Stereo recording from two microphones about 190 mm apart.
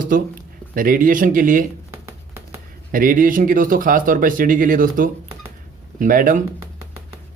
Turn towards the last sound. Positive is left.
turn(degrees=-45)  # may be behind; listen again after turning